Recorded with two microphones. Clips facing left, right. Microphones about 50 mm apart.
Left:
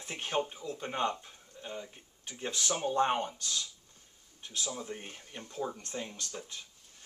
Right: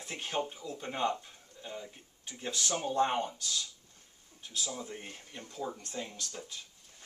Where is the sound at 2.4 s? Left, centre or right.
Left.